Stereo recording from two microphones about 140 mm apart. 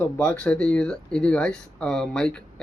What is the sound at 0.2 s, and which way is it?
Speech, 10° left (ahead or behind).